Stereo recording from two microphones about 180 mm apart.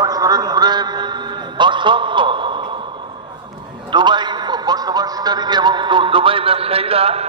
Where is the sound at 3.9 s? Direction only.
25° right (ahead or behind).